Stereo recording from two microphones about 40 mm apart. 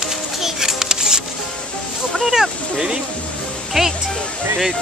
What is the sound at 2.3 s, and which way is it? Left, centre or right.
Speech, centre.